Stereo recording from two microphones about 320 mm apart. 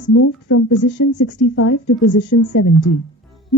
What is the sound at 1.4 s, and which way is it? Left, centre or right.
A woman's voice, left.